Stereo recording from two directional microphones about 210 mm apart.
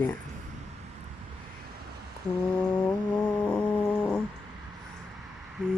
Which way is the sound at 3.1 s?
5° left (ahead or behind).